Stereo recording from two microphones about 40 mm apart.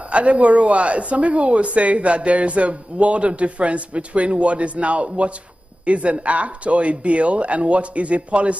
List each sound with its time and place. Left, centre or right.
0.1 s a woman's voice: right